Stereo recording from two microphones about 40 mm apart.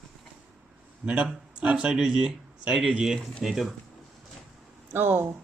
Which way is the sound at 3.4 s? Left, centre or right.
Centre.